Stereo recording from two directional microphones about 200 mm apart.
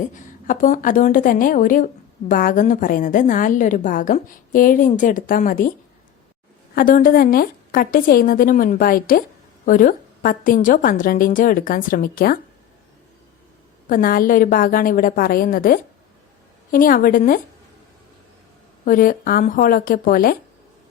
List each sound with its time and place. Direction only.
0.1 s a woman's voice: 40° left (ahead or behind)
6.7 s a woman's voice: 45° left (ahead or behind)
13.8 s a woman's voice: 45° left (ahead or behind)
18.9 s a woman's voice: 45° left (ahead or behind)